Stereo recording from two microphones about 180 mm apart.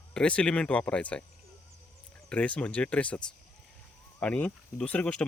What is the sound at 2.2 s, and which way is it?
Speech, 5° left (ahead or behind).